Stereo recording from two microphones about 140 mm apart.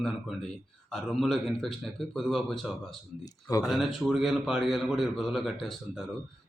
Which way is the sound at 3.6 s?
Centre (ahead or behind).